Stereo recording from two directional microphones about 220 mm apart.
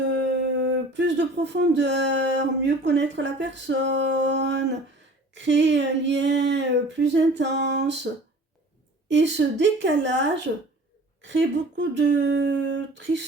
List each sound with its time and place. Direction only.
0.1 s a sound: 55° right (ahead or behind)
5.3 s speech: 55° right (ahead or behind)
9.0 s speech: 55° right (ahead or behind)